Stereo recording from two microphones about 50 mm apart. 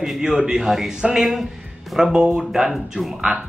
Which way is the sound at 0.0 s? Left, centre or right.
Centre.